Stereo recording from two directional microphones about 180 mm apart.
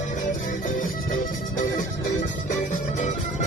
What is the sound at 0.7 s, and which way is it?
Music, 45° left (ahead or behind).